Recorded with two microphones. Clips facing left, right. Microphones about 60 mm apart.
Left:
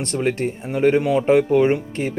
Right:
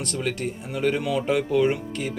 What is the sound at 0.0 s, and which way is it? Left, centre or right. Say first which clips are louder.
A man's voice: left 6 dB; left.